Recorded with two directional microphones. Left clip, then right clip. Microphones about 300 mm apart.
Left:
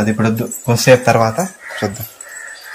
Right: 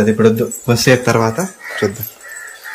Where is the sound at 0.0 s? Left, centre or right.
Centre.